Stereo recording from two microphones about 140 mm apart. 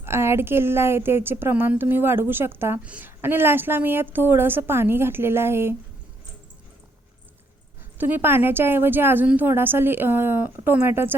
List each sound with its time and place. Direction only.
0.0 s speech: 20° right (ahead or behind)
7.9 s speech: 15° right (ahead or behind)